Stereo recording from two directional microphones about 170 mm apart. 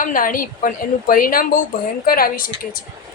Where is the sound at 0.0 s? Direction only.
55° left (ahead or behind).